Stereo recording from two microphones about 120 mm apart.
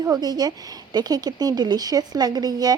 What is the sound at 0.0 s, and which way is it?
Speech, 35° right (ahead or behind).